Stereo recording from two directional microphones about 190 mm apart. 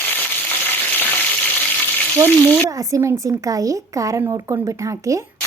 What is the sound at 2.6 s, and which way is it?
A woman's voice, 15° right (ahead or behind).